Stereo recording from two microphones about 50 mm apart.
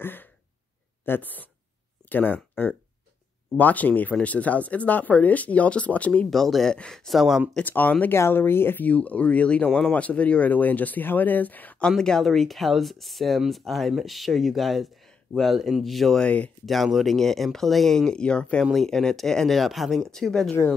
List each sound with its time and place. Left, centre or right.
0.0 s throat clearing: left
1.0 s speech: left
6.3 s speech: centre
7.1 s speech: centre
7.6 s speech: left
8.1 s speech: left
8.8 s speech: left
12.0 s speech: centre
16.2 s speech: left
16.6 s speech: centre; by 18.6 s left
18.9 s speech: centre